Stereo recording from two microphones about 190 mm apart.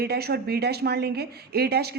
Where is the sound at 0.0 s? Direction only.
55° right (ahead or behind).